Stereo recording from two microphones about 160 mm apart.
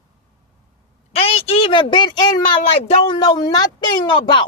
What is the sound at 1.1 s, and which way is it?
Speech, 40° left (ahead or behind).